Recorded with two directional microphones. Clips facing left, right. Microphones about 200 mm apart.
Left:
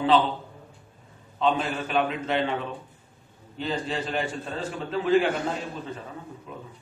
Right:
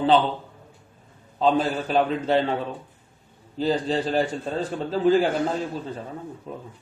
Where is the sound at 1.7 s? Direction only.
35° right (ahead or behind).